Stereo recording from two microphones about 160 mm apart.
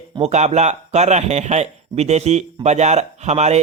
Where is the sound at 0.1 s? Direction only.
40° right (ahead or behind).